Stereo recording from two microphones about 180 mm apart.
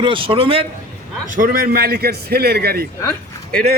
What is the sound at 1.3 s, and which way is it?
A man's voice, 50° right (ahead or behind).